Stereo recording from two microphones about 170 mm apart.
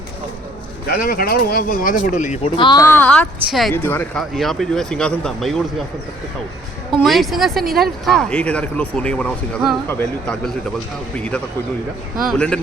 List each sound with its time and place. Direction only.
0.9 s speech: 55° left (ahead or behind)
2.6 s speech: 25° left (ahead or behind)
2.8 s a woman's voice: 10° left (ahead or behind)
7.0 s speech: centre (ahead or behind)
12.2 s speech: centre (ahead or behind)